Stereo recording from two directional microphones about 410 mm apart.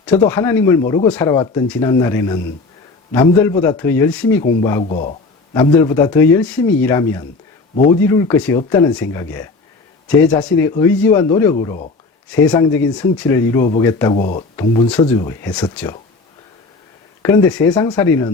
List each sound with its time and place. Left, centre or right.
0.2 s speech: centre
17.2 s speech: centre